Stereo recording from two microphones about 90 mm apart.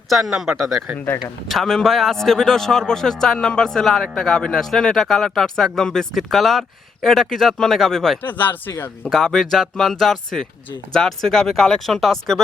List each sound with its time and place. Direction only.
0.1 s a man's voice: centre (ahead or behind)
0.9 s speech: 20° left (ahead or behind)
1.2 s a man's voice: 5° left (ahead or behind)
8.2 s speech: 20° left (ahead or behind)
9.1 s a man's voice: 5° left (ahead or behind)